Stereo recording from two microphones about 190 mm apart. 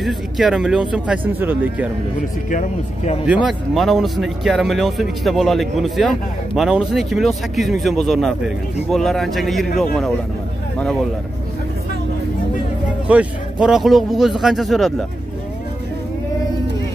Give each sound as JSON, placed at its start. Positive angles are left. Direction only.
{"t": 0.0, "sound": "speech", "side_deg": 0}
{"t": 2.5, "sound": "speech", "side_deg": 40}
{"t": 3.4, "sound": "speech", "side_deg": 0}
{"t": 13.1, "sound": "speech", "side_deg": -5}